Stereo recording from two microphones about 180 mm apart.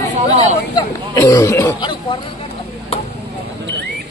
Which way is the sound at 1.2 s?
20° left (ahead or behind).